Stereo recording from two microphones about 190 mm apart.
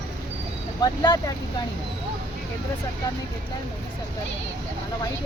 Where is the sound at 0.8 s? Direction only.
20° left (ahead or behind).